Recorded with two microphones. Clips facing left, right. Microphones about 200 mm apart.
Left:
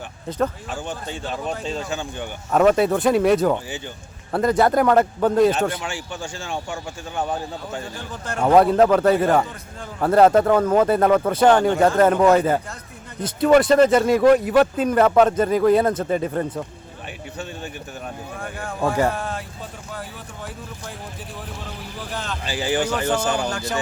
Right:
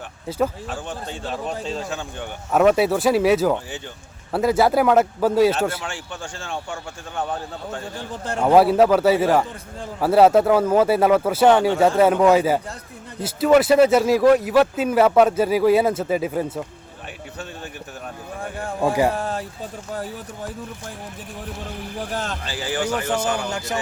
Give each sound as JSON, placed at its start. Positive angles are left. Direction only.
{"t": 0.3, "sound": "speech", "side_deg": -5}
{"t": 7.9, "sound": "speech", "side_deg": -30}
{"t": 8.4, "sound": "speech", "side_deg": -5}
{"t": 19.1, "sound": "speech", "side_deg": -35}
{"t": 21.9, "sound": "speech", "side_deg": -45}
{"t": 22.4, "sound": "a man's voice", "side_deg": 15}
{"t": 23.5, "sound": "a man's voice", "side_deg": -20}